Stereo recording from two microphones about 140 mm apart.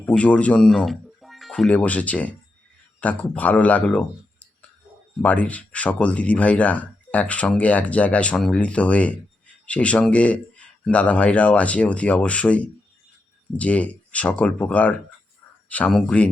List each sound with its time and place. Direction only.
0.0 s speech: 10° left (ahead or behind)